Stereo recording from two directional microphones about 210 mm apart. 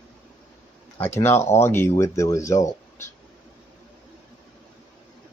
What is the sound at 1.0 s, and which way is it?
Speech, 10° left (ahead or behind).